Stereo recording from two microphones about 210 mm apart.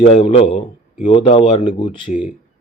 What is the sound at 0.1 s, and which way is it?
Speech, 25° left (ahead or behind).